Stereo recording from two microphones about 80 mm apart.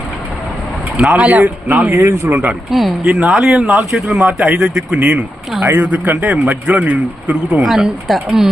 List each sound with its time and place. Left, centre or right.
1.1 s speech: centre; by 2.4 s right
2.6 s speech: centre
7.6 s speech: centre